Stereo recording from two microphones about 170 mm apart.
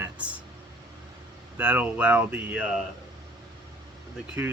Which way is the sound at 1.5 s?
10° right (ahead or behind).